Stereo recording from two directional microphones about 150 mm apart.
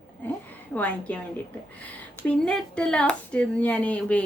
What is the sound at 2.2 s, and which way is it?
Speech, 5° left (ahead or behind).